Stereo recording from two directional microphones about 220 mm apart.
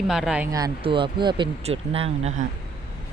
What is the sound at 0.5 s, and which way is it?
Speech, 20° right (ahead or behind).